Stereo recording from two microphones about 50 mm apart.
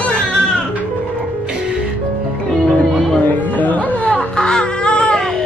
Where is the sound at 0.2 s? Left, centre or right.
Centre.